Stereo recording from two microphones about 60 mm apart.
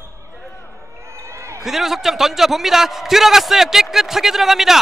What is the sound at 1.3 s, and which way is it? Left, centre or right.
Basketball bounce, right.